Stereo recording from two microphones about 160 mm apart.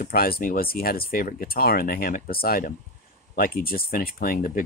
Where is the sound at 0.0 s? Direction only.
70° left (ahead or behind).